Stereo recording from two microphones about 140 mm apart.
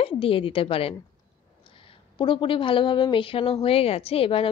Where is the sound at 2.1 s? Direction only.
35° left (ahead or behind).